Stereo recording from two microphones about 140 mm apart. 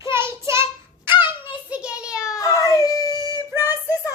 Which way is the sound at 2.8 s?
25° left (ahead or behind).